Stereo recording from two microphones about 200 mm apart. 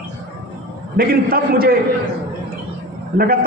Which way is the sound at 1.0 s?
50° right (ahead or behind).